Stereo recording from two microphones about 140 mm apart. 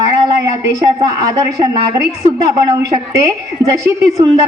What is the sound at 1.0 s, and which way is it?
A woman's voice, 25° right (ahead or behind).